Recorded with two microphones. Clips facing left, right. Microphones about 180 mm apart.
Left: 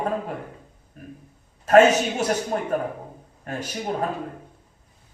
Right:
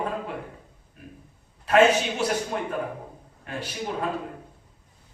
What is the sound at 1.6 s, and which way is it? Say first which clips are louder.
A man's voice: left 4 dB; 45° left (ahead or behind).